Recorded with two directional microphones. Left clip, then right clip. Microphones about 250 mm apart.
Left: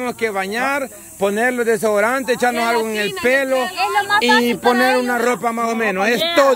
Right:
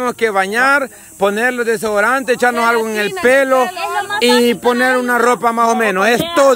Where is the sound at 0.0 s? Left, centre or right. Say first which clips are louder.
Right 6 dB; centre.